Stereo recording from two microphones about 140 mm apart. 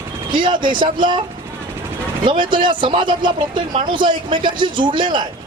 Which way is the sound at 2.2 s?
35° right (ahead or behind).